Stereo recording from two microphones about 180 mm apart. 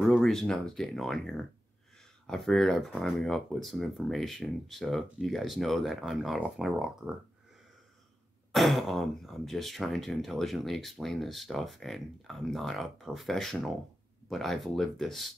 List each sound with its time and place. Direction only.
0.0 s speech: centre (ahead or behind)
8.5 s speech: centre (ahead or behind)